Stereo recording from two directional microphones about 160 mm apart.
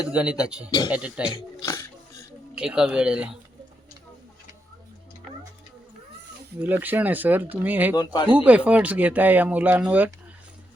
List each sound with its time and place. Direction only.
0.0 s speech: 5° right (ahead or behind)
1.3 s speech: 15° left (ahead or behind)
2.6 s speech: 5° right (ahead or behind)
6.6 s speech: 10° right (ahead or behind)
7.9 s speech: 30° left (ahead or behind)
8.3 s speech: 10° right (ahead or behind)